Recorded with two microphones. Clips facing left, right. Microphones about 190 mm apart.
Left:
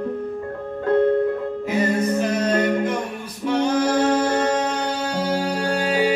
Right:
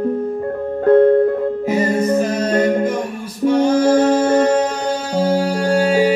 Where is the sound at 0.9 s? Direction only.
50° right (ahead or behind).